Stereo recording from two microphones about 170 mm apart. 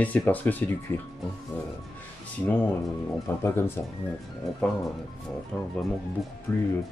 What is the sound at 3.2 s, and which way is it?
Speech, 15° left (ahead or behind).